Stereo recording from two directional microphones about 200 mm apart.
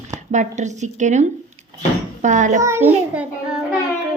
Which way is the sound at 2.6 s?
10° right (ahead or behind).